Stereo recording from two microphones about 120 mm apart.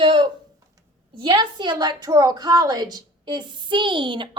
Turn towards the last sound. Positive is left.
turn(degrees=-40)  # may be behind; listen again after turning